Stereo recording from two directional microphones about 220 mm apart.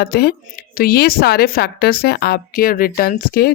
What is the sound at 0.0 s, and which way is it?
A woman's voice, 45° left (ahead or behind).